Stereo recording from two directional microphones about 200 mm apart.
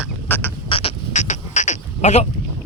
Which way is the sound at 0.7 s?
30° left (ahead or behind).